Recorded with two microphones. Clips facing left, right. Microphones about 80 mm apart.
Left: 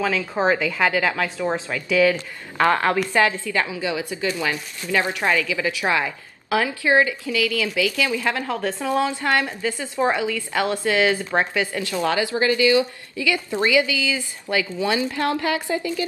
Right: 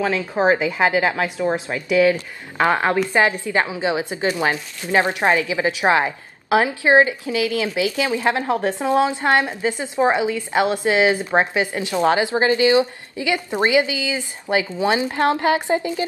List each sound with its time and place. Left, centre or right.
0.0 s a woman's voice: centre